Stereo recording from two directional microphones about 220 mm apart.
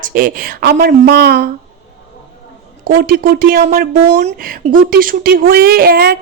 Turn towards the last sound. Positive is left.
turn(degrees=-45)  # may be behind; listen again after turning